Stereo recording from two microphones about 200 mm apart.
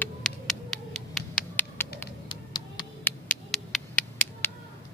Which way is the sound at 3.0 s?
5° left (ahead or behind).